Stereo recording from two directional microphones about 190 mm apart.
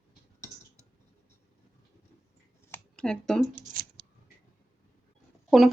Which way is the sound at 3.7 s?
50° right (ahead or behind).